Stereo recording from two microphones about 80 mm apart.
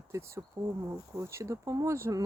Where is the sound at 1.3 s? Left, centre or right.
Right.